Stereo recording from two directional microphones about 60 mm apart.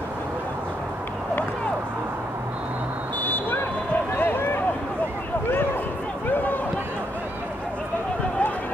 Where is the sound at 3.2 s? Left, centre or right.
Left.